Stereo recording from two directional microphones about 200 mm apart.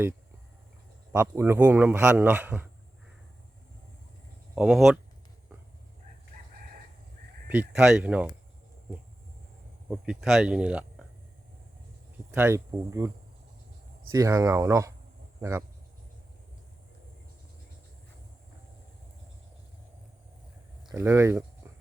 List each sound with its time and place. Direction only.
1.1 s speech: 10° right (ahead or behind)
4.5 s speech: 5° right (ahead or behind)
7.4 s speech: 10° right (ahead or behind)
9.9 s speech: 5° right (ahead or behind)
12.3 s speech: 10° right (ahead or behind)
14.1 s speech: 15° right (ahead or behind)
20.9 s speech: 10° right (ahead or behind)